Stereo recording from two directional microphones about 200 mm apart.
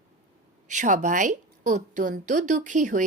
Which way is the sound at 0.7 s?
40° right (ahead or behind).